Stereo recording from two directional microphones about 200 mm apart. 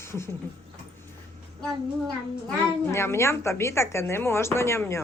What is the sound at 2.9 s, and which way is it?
Speech, 15° left (ahead or behind).